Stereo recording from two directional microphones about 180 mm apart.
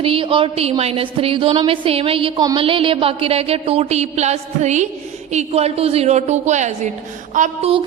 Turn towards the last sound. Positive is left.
turn(degrees=-45)  # may be behind; listen again after turning